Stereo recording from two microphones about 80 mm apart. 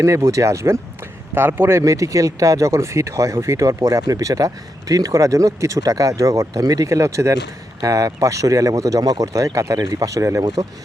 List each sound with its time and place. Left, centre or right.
0.0 s speech: right
1.4 s a man's voice: right
1.8 s speech: right